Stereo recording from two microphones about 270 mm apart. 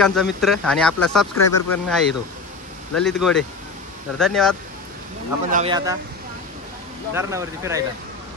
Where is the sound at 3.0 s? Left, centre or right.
Centre.